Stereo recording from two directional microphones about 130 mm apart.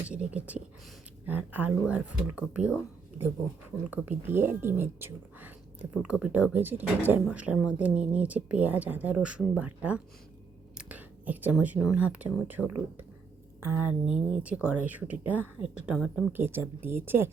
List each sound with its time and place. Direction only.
0.0 s speech: 10° right (ahead or behind)
3.8 s speech: 15° right (ahead or behind)
16.3 s speech: 15° right (ahead or behind)